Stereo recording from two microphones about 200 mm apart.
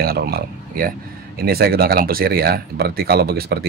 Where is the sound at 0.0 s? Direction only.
50° right (ahead or behind).